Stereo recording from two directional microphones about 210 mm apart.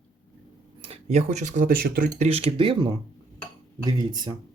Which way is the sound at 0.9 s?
35° right (ahead or behind).